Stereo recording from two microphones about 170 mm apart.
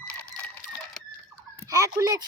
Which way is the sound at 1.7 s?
20° right (ahead or behind).